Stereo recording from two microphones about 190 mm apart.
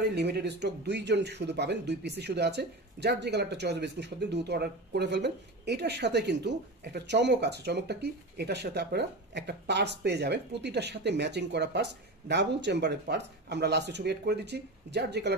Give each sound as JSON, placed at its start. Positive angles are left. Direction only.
{"t": 0.0, "sound": "speech", "side_deg": -60}